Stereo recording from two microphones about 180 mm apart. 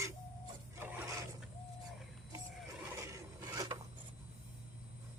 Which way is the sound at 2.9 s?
15° right (ahead or behind).